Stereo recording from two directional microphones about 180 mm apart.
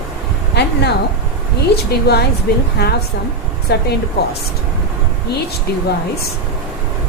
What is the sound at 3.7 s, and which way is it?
Speech, 65° left (ahead or behind).